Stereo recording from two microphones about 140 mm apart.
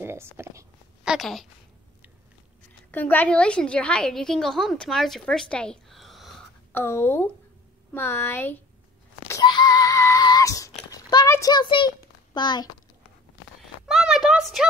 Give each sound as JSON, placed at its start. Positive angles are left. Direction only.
{"t": 0.0, "sound": "speech", "side_deg": -15}
{"t": 1.0, "sound": "a woman's voice", "side_deg": 0}
{"t": 2.9, "sound": "a woman's voice", "side_deg": 10}
{"t": 6.7, "sound": "a woman's voice", "side_deg": 15}
{"t": 9.4, "sound": "a sound", "side_deg": 30}
{"t": 11.5, "sound": "a child's voice", "side_deg": 35}
{"t": 13.8, "sound": "a sound", "side_deg": 0}